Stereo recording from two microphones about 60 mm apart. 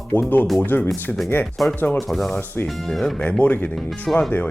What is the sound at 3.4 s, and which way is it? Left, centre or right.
Speech, left.